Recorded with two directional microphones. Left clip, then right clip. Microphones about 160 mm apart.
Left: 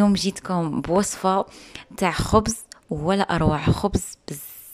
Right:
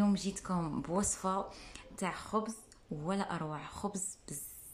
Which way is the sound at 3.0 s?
65° left (ahead or behind).